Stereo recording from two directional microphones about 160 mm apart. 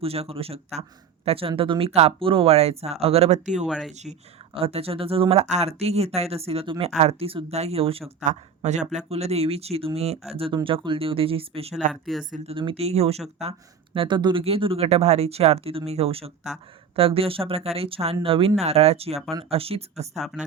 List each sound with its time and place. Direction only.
0.0 s speech: 35° right (ahead or behind)
3.7 s speech: 5° right (ahead or behind)
4.5 s speech: 35° right (ahead or behind)
8.2 s speech: 50° right (ahead or behind)
12.1 s speech: centre (ahead or behind)
12.5 s speech: 35° right (ahead or behind)
20.1 s speech: centre (ahead or behind)